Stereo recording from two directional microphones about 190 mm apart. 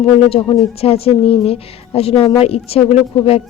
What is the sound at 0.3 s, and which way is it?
Speech, 30° left (ahead or behind).